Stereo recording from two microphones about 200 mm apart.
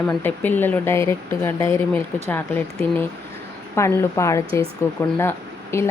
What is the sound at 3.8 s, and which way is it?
Speech, 15° left (ahead or behind).